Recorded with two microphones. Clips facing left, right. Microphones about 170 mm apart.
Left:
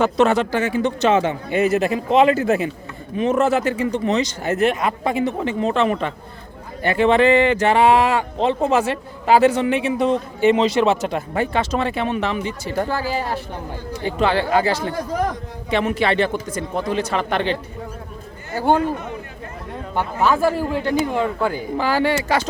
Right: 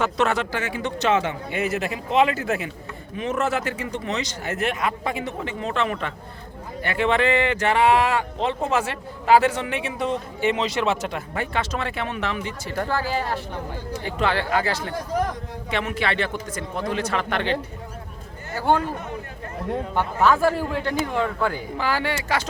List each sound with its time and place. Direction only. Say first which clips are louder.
0.0 s speech: left 6 dB; 35° left (ahead or behind)
12.9 s speech: left 2 dB; 10° left (ahead or behind)
14.0 s speech: left 5 dB; 30° left (ahead or behind)
14.9 s speech: left 3 dB; 90° left
15.7 s speech: left 6 dB; 35° left (ahead or behind)
18.5 s speech: left 3 dB; 15° left (ahead or behind)
20.1 s speech: left 1 dB; 5° left (ahead or behind)
21.8 s speech: left 7 dB; 35° left (ahead or behind)